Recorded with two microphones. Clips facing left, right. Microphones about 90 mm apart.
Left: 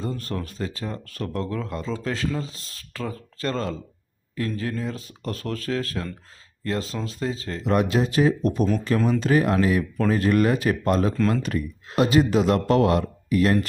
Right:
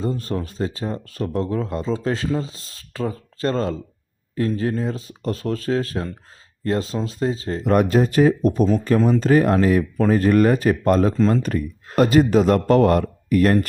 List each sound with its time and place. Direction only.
0.0 s speech: 30° right (ahead or behind)
7.6 s speech: 45° right (ahead or behind)
11.2 s speech: 25° right (ahead or behind)
11.4 s speech: 40° right (ahead or behind)